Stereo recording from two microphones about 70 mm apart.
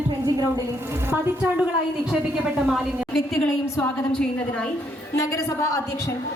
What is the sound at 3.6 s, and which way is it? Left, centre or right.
Speech, left.